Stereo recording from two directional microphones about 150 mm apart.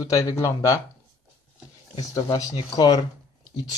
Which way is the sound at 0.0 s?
25° left (ahead or behind).